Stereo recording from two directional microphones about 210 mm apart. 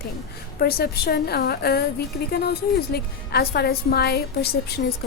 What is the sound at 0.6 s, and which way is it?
A woman's voice, 50° left (ahead or behind).